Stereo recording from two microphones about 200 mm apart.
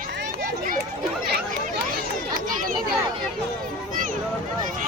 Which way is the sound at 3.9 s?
40° right (ahead or behind).